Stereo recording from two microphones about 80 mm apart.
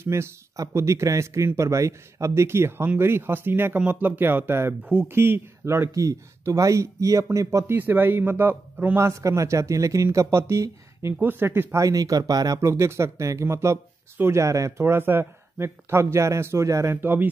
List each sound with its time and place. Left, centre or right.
0.0 s speech: right
5.9 s speech: right
7.7 s speech: right
8.9 s speech: right
11.1 s speech: right
11.8 s speech: right
12.5 s speech: right
14.9 s speech: right